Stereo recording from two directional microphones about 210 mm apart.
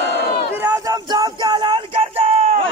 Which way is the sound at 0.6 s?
20° right (ahead or behind).